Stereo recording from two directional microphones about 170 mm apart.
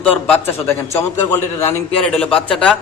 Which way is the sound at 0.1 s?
10° left (ahead or behind).